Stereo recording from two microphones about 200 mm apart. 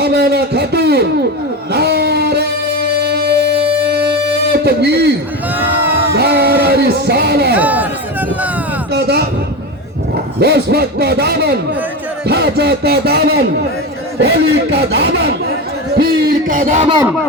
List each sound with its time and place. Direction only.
0.0 s speech: 55° right (ahead or behind)
1.7 s music: 55° right (ahead or behind)
4.5 s a man's voice: 55° right (ahead or behind)
5.5 s speech: 10° right (ahead or behind)
6.1 s a sound: 55° right (ahead or behind)
7.5 s chatter: 10° right (ahead or behind)
8.9 s speech: 55° right (ahead or behind)
10.4 s speech: 55° right (ahead or behind)
16.0 s a sound: 50° right (ahead or behind)